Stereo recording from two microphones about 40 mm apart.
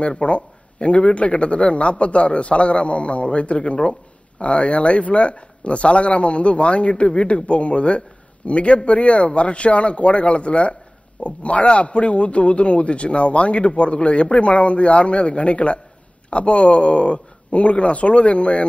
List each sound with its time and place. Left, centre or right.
0.0 s a man's voice: left